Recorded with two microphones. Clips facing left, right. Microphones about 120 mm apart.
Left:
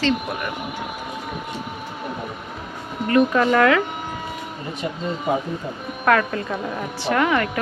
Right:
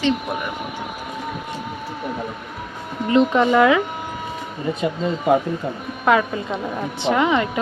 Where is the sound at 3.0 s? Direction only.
20° right (ahead or behind).